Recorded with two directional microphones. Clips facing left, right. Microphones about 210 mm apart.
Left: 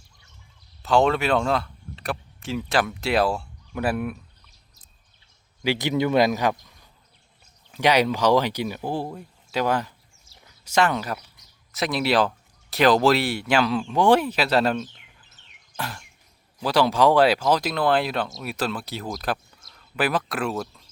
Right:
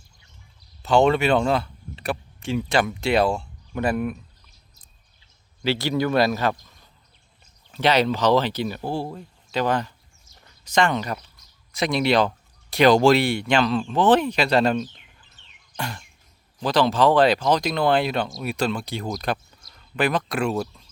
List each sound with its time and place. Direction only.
0.8 s speech: centre (ahead or behind)
5.6 s speech: 15° left (ahead or behind)
15.7 s a sound: centre (ahead or behind)
16.6 s speech: 10° left (ahead or behind)